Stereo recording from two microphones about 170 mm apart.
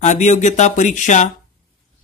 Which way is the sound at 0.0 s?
45° left (ahead or behind).